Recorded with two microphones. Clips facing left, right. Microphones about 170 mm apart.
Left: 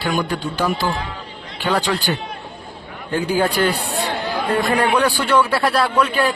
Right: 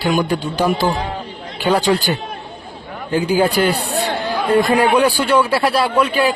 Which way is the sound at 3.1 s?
10° right (ahead or behind).